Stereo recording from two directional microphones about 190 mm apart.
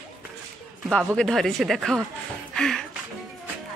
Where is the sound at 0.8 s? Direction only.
5° left (ahead or behind).